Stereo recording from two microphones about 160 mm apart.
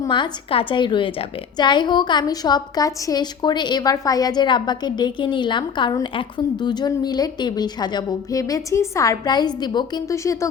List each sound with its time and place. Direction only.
0.0 s a woman's voice: 30° left (ahead or behind)